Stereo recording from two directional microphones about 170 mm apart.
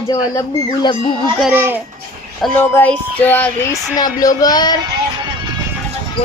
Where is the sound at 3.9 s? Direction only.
20° left (ahead or behind).